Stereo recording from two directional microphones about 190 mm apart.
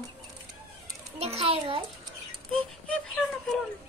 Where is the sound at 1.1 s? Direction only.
30° right (ahead or behind).